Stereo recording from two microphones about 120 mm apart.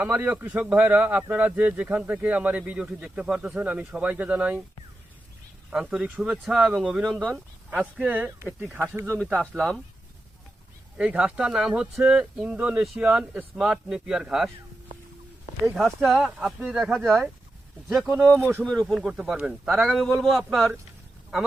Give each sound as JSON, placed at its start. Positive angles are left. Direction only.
{"t": 0.0, "sound": "a man's voice", "side_deg": -15}
{"t": 5.7, "sound": "a man's voice", "side_deg": -5}
{"t": 7.7, "sound": "a man's voice", "side_deg": -10}
{"t": 9.6, "sound": "a man's voice", "side_deg": 5}
{"t": 10.9, "sound": "a man's voice", "side_deg": -10}
{"t": 15.7, "sound": "a man's voice", "side_deg": 0}
{"t": 18.1, "sound": "speech", "side_deg": -20}
{"t": 18.6, "sound": "a man's voice", "side_deg": 5}